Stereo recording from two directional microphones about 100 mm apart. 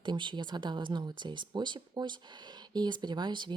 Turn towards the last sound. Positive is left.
turn(degrees=-50)  # may be behind; listen again after turning